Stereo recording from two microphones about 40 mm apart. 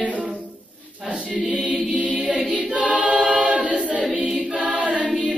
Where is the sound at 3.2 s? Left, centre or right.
Right.